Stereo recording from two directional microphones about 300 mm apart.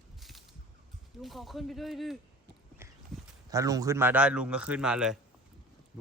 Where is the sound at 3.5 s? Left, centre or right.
Centre.